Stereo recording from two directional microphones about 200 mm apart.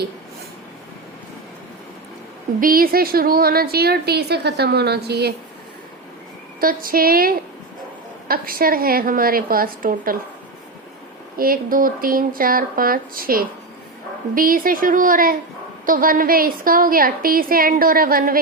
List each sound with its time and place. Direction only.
2.6 s a woman's voice: 45° right (ahead or behind)
6.6 s a woman's voice: 45° right (ahead or behind)
11.3 s a woman's voice: 45° right (ahead or behind)